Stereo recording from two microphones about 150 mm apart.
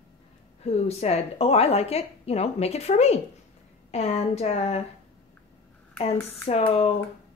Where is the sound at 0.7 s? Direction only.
45° left (ahead or behind).